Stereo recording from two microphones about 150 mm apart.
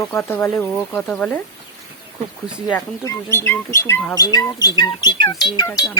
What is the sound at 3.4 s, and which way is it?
Speech, 15° left (ahead or behind).